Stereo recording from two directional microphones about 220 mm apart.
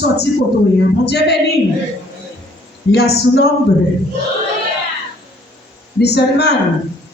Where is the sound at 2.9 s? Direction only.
45° left (ahead or behind).